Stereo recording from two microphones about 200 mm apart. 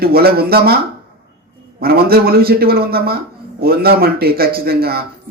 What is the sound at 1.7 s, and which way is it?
A man's voice, 50° right (ahead or behind).